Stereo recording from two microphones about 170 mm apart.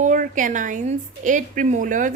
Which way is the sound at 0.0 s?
50° right (ahead or behind).